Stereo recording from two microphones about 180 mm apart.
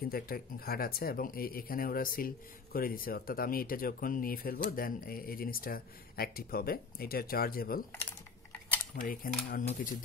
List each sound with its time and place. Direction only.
0.0 s speech: 55° left (ahead or behind)
8.9 s speech: 50° left (ahead or behind)